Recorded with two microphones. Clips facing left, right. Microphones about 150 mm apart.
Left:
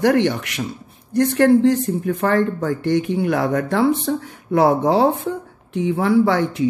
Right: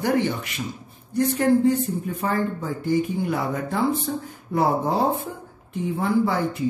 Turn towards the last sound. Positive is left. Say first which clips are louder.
# left 5 dB
turn(degrees=85)